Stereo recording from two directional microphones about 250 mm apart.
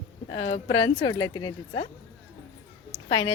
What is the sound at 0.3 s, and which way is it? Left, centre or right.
A woman's voice, left.